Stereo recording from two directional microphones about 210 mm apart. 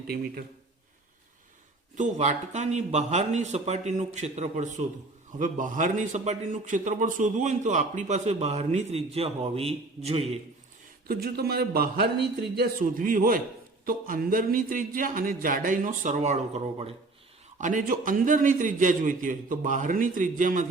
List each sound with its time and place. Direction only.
2.0 s a man's voice: 35° right (ahead or behind)
11.1 s a man's voice: 50° right (ahead or behind); by 16.9 s 30° right (ahead or behind)
17.6 s a man's voice: 40° right (ahead or behind)